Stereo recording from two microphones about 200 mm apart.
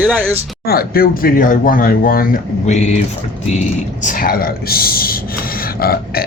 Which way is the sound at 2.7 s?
35° left (ahead or behind).